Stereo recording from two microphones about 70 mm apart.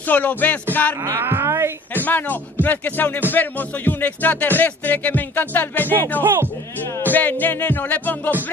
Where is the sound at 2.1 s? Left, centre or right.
Left.